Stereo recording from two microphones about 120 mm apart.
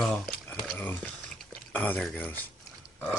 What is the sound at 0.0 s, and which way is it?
Squish, 5° left (ahead or behind).